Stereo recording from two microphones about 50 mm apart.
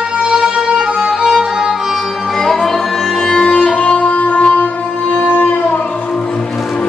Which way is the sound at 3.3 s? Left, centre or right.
Centre.